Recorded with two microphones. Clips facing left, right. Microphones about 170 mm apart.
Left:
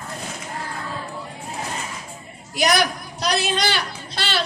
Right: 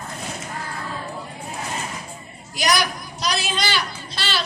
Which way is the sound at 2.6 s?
60° left (ahead or behind).